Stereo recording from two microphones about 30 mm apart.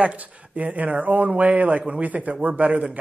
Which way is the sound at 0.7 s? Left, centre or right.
Right.